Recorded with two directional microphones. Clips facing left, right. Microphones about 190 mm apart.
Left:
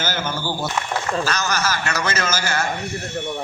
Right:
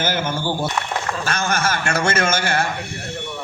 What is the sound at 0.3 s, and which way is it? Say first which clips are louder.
Speech: right 3 dB; 25° right (ahead or behind).